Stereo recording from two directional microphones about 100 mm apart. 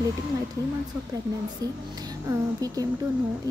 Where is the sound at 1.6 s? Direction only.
40° right (ahead or behind).